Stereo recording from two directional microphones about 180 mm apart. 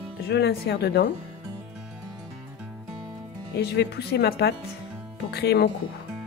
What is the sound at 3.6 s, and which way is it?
Speech, 65° left (ahead or behind).